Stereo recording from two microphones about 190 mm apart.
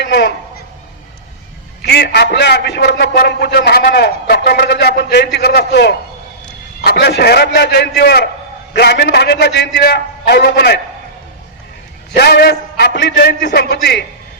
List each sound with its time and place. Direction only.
0.0 s a man's voice: 65° left (ahead or behind)
1.8 s a man's voice: 60° left (ahead or behind)
12.1 s a man's voice: 55° left (ahead or behind)